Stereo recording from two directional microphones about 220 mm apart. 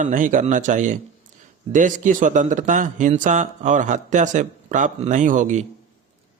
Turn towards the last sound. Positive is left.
turn(degrees=-35)  # may be behind; listen again after turning